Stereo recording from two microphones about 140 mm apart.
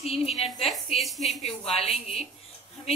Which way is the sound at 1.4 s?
45° left (ahead or behind).